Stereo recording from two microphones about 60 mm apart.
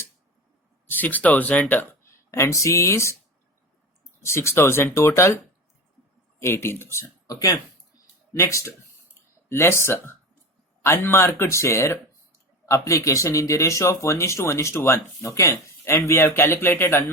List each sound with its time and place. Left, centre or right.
0.9 s speech: left
2.0 s speech: left
4.2 s speech: left
6.4 s speech: left
7.0 s speech: left
8.3 s speech: left
9.5 s speech: left
12.7 s speech: left